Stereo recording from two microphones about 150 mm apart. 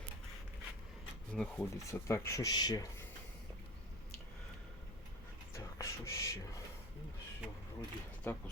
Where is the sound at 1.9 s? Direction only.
20° left (ahead or behind).